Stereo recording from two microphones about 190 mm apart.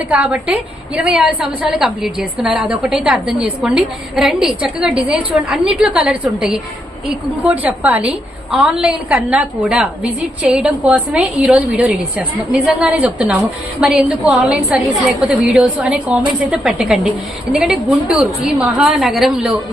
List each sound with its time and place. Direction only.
0.1 s a woman's voice: 5° right (ahead or behind)